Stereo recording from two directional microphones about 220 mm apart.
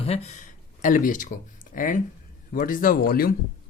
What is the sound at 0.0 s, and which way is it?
Speech, 30° left (ahead or behind).